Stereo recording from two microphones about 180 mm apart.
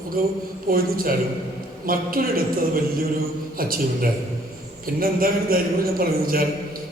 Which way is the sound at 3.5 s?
55° right (ahead or behind).